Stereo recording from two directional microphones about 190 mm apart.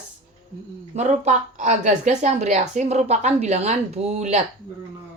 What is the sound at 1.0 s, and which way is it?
Speech, 40° right (ahead or behind).